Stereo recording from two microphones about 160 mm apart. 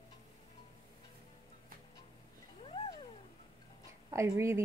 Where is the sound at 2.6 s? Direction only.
35° left (ahead or behind).